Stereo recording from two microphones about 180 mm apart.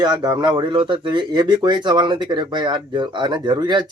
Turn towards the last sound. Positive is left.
turn(degrees=-25)  # may be behind; listen again after turning